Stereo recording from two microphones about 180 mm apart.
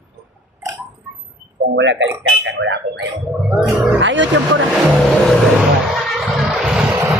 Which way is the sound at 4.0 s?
90° right.